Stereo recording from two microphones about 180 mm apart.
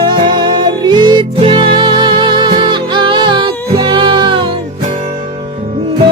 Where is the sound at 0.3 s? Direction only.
25° right (ahead or behind).